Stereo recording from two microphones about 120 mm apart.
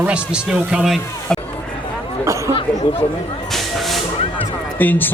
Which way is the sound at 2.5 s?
45° left (ahead or behind).